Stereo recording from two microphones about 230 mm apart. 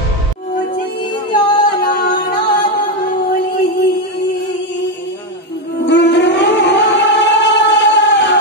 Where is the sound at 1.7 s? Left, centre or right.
Left.